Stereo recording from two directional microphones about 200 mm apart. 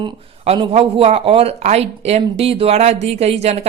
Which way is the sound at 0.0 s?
25° right (ahead or behind).